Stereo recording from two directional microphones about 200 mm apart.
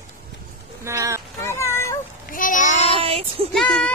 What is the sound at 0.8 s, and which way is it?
Speech, 15° right (ahead or behind).